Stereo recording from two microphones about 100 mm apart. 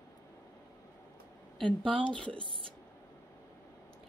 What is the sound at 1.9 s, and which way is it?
Speech, 55° right (ahead or behind).